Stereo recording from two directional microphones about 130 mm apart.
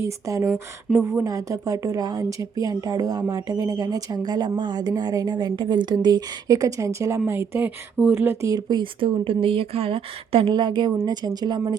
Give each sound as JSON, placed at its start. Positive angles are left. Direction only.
{"t": 0.0, "sound": "a woman's voice", "side_deg": -25}